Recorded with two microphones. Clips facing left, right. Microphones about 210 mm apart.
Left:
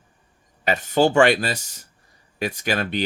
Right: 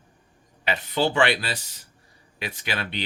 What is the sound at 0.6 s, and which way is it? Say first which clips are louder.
Speech: left 6 dB; 45° left (ahead or behind).